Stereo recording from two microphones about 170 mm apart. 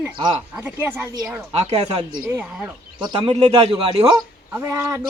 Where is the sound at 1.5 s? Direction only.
40° right (ahead or behind).